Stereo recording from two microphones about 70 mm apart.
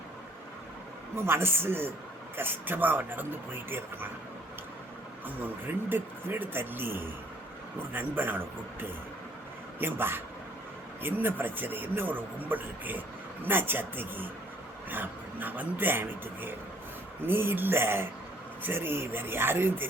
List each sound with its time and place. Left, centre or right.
1.1 s a man's voice: right
5.2 s a man's voice: right
9.7 s a man's voice: right